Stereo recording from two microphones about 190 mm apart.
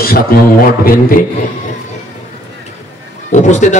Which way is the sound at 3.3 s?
40° left (ahead or behind).